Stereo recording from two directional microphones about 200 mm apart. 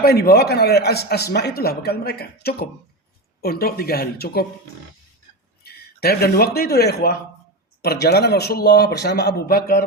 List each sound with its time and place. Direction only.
0.0 s a man's voice: 50° left (ahead or behind)
5.6 s a man's voice: 50° left (ahead or behind)